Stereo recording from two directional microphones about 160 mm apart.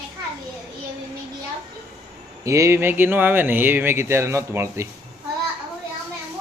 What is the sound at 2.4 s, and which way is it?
Speech, 20° right (ahead or behind).